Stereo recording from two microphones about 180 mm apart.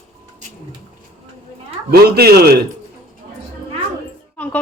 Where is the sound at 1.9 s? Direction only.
60° right (ahead or behind).